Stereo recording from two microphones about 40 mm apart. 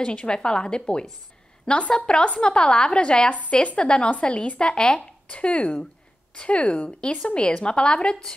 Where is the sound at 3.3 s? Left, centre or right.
Left.